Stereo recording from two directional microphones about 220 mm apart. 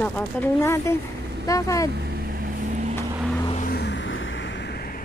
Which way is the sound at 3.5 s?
35° left (ahead or behind).